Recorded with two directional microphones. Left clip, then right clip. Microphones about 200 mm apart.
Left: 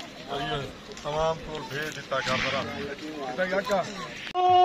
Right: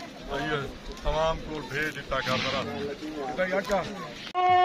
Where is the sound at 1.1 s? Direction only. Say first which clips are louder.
Even; 50° left (ahead or behind).